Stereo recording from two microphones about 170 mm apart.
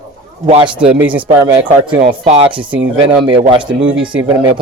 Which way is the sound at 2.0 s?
35° right (ahead or behind).